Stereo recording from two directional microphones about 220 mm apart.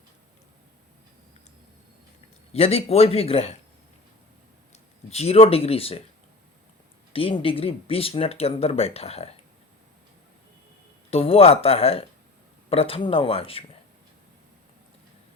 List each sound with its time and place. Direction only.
2.5 s speech: 30° left (ahead or behind)
5.0 s speech: 30° left (ahead or behind)
7.1 s speech: 25° left (ahead or behind)
11.1 s speech: 25° left (ahead or behind)